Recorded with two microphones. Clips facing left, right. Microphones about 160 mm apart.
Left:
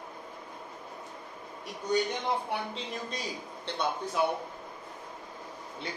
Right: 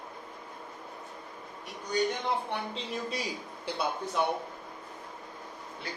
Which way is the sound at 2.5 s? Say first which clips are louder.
Even; centre (ahead or behind).